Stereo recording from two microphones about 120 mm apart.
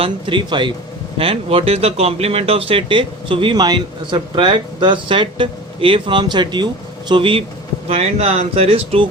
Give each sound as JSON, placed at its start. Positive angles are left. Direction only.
{"t": 0.0, "sound": "speech", "side_deg": -45}
{"t": 7.9, "sound": "speech", "side_deg": -60}